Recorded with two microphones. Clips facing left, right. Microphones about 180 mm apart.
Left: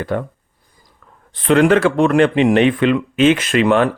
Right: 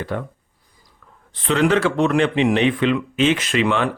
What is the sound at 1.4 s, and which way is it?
Speech, 55° left (ahead or behind).